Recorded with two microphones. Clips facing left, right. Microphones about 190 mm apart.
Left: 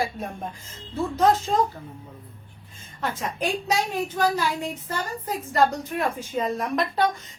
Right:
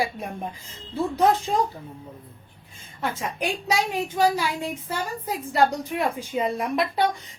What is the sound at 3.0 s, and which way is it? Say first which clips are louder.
A woman's voice: even; 10° right (ahead or behind).